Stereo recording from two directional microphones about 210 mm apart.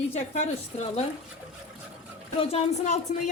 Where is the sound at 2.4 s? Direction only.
30° left (ahead or behind).